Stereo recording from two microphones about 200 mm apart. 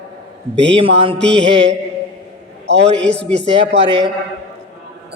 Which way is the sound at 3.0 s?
60° right (ahead or behind).